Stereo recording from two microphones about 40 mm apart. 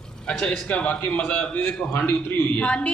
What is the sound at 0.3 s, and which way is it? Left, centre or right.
A woman's voice, left.